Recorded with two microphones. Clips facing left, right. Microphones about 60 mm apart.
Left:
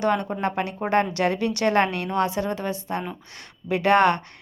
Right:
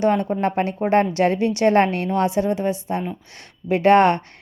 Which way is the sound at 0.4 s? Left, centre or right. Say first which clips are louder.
Right 5 dB; right.